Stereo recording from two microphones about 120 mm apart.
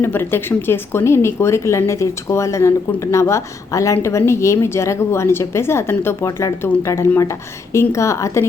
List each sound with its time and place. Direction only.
0.0 s a woman's voice: 20° left (ahead or behind)